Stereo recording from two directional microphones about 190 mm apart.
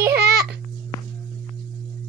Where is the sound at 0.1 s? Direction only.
60° right (ahead or behind).